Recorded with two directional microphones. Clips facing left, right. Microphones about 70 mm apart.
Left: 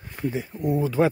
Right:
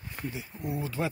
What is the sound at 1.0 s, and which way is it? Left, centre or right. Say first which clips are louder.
Speech: left 11 dB; left.